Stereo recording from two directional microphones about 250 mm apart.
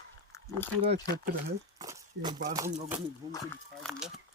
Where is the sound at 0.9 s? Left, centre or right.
Right.